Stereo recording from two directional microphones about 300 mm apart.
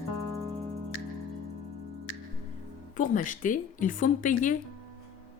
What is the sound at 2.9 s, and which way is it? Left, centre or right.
Speech, left.